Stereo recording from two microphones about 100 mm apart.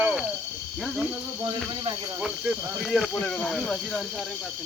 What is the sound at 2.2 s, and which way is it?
Speech, 5° right (ahead or behind).